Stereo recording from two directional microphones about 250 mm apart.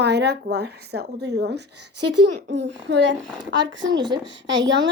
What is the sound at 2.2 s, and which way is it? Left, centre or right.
Speech, right.